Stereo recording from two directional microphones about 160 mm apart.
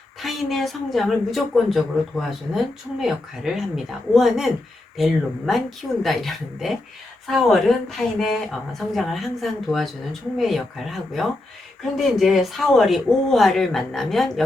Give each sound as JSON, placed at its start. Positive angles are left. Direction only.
{"t": 0.2, "sound": "a woman's voice", "side_deg": 0}